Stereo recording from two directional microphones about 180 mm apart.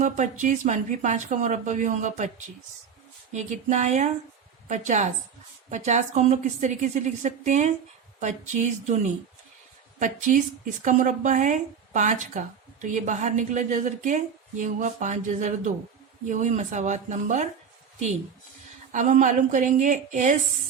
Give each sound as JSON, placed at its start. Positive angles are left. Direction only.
{"t": 0.0, "sound": "a woman's voice", "side_deg": -45}
{"t": 3.3, "sound": "a woman's voice", "side_deg": -40}
{"t": 18.9, "sound": "a woman's voice", "side_deg": -45}